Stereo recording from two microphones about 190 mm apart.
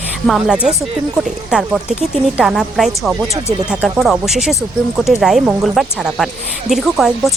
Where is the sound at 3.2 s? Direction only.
20° right (ahead or behind).